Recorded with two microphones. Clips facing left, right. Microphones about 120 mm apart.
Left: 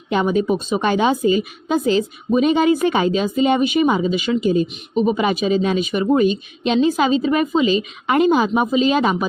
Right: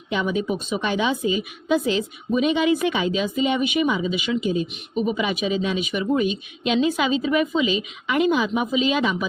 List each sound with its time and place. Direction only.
0.1 s a woman's voice: 45° left (ahead or behind)